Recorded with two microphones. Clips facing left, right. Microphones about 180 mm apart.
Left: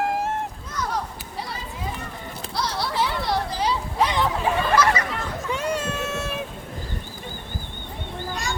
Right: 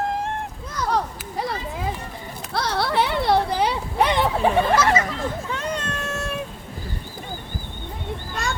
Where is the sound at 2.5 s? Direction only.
60° right (ahead or behind).